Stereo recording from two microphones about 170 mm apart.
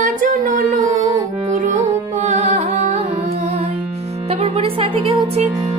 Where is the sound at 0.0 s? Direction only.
45° right (ahead or behind).